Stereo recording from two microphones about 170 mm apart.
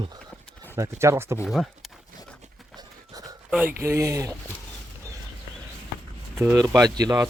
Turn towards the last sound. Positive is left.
turn(degrees=-20)  # may be behind; listen again after turning